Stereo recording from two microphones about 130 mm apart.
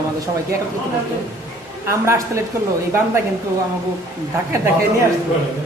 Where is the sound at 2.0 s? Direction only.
20° right (ahead or behind).